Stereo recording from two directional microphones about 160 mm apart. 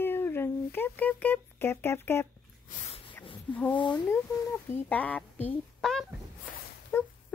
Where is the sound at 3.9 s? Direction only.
10° left (ahead or behind).